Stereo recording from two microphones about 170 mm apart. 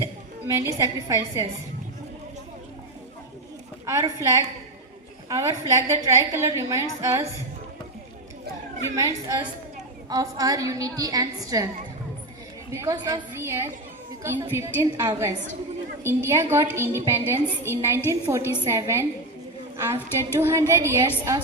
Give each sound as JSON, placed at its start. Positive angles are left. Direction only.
{"t": 0.0, "sound": "a woman's voice", "side_deg": -15}
{"t": 3.8, "sound": "a woman's voice", "side_deg": -15}
{"t": 9.0, "sound": "a woman's voice", "side_deg": -15}
{"t": 12.7, "sound": "a woman's voice", "side_deg": -20}